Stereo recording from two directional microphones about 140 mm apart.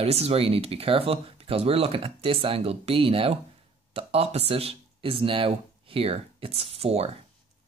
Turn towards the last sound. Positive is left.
turn(degrees=-45)  # may be behind; listen again after turning